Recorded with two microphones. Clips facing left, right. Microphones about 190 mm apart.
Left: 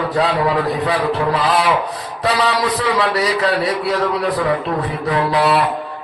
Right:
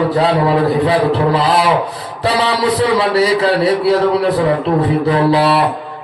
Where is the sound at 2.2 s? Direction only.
30° right (ahead or behind).